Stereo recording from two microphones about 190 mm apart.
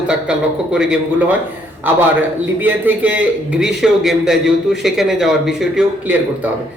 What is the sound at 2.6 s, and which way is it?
A man's voice, 10° right (ahead or behind).